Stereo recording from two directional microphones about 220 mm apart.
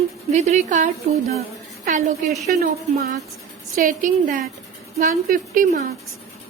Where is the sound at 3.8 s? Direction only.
40° right (ahead or behind).